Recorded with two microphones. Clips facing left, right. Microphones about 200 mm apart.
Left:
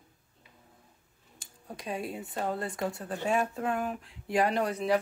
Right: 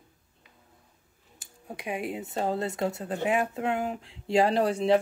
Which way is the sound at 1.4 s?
15° right (ahead or behind).